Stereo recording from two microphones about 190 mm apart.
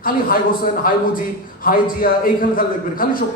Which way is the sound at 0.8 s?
50° left (ahead or behind).